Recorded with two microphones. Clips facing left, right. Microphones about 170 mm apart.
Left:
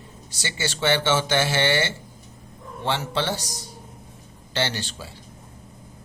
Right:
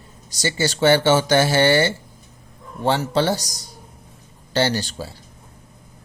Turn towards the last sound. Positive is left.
turn(degrees=-40)  # may be behind; listen again after turning